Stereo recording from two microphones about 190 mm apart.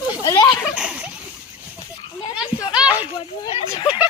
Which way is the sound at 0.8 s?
5° right (ahead or behind).